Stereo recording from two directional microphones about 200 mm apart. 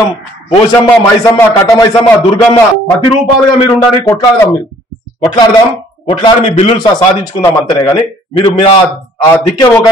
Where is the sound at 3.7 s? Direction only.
15° left (ahead or behind).